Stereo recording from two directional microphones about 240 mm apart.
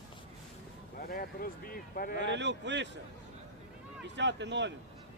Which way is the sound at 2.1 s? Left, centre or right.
Right.